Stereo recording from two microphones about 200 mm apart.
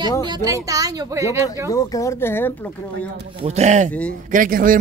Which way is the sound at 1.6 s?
15° left (ahead or behind).